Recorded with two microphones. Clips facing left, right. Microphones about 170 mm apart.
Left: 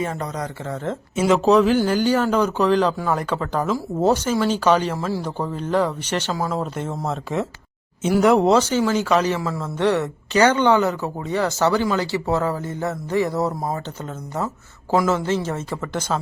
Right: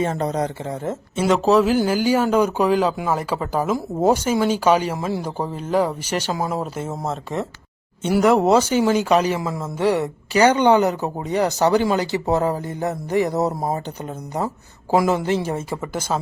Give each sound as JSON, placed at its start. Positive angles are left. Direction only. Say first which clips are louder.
{"t": 0.0, "sound": "speech", "louder": "right 5 dB", "side_deg": -30}
{"t": 1.1, "sound": "a woman's voice", "louder": "left 1 dB", "side_deg": 0}